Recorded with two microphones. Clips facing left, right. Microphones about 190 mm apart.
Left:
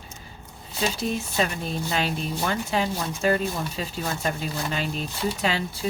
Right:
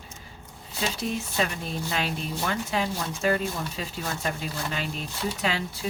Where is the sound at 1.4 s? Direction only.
35° left (ahead or behind).